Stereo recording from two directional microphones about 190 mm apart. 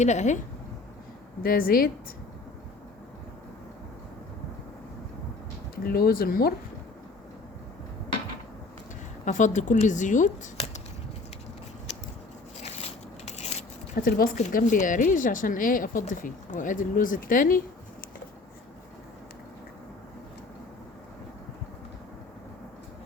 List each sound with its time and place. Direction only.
0.0 s speech: 35° left (ahead or behind)
1.4 s a woman's voice: 50° left (ahead or behind)
5.8 s a woman's voice: 50° left (ahead or behind)
9.2 s speech: 40° left (ahead or behind)
13.2 s a sound: 35° left (ahead or behind)
13.9 s a woman's voice: 50° left (ahead or behind)